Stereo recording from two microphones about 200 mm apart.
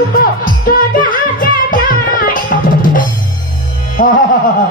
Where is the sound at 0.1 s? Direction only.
45° left (ahead or behind).